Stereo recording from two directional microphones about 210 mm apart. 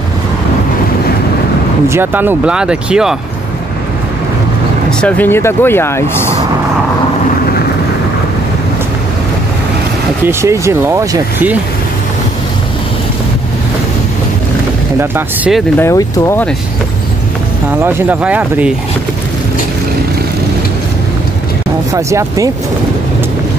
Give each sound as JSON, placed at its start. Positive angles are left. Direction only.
{"t": 1.9, "sound": "speech", "side_deg": -10}
{"t": 5.0, "sound": "speech", "side_deg": 10}
{"t": 10.2, "sound": "speech", "side_deg": -15}
{"t": 15.0, "sound": "speech", "side_deg": -10}
{"t": 15.8, "sound": "speech", "side_deg": 15}
{"t": 17.6, "sound": "speech", "side_deg": -10}
{"t": 21.9, "sound": "speech", "side_deg": -15}